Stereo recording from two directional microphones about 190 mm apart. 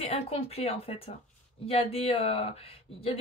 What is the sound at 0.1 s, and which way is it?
Speech, 30° left (ahead or behind).